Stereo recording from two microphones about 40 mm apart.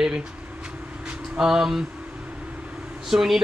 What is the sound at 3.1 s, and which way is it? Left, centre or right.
Speech, centre.